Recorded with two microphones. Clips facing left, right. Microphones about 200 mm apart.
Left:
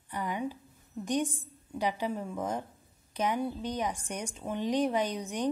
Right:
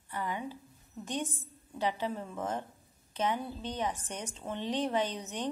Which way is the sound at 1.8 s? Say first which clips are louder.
Left 1 dB; 15° left (ahead or behind).